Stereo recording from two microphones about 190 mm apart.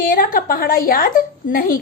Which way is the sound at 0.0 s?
45° left (ahead or behind).